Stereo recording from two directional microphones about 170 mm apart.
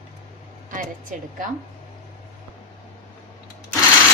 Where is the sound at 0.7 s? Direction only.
50° right (ahead or behind).